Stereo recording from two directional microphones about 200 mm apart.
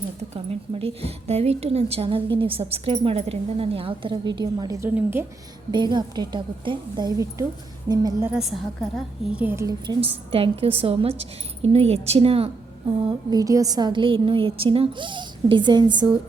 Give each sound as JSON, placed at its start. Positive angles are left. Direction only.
{"t": 0.7, "sound": "a woman's voice", "side_deg": -30}
{"t": 5.7, "sound": "a woman's voice", "side_deg": -20}
{"t": 8.3, "sound": "a woman's voice", "side_deg": 0}
{"t": 13.1, "sound": "a woman's voice", "side_deg": -20}